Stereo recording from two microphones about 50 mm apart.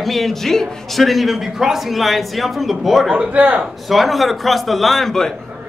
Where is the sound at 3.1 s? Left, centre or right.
Right.